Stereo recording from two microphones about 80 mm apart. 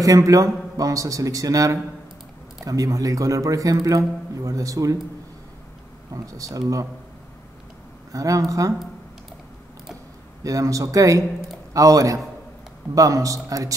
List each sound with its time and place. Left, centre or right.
0.0 s a man's voice: right
6.1 s a man's voice: right
8.1 s a man's voice: right
10.4 s a man's voice: right